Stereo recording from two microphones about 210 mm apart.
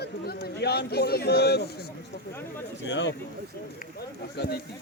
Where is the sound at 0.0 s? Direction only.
50° left (ahead or behind).